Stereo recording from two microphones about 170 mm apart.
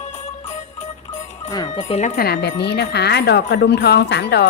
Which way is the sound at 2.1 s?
70° left (ahead or behind).